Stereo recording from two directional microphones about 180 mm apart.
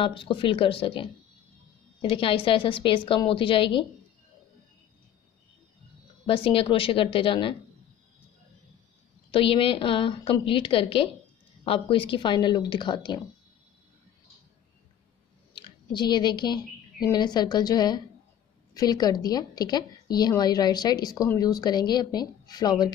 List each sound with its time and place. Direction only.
0.0 s a woman's voice: 30° left (ahead or behind)
6.2 s a woman's voice: 30° left (ahead or behind)
9.3 s a woman's voice: 30° left (ahead or behind)
15.5 s a woman's voice: 25° left (ahead or behind)